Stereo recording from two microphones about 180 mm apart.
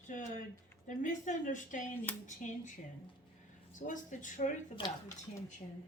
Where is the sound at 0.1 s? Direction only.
40° left (ahead or behind).